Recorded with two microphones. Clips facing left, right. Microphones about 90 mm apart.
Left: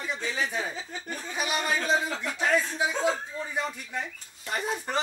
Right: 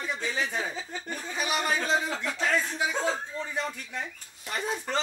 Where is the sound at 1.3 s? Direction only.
15° left (ahead or behind).